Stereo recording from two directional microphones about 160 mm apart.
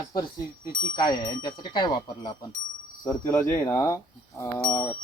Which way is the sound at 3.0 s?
20° left (ahead or behind).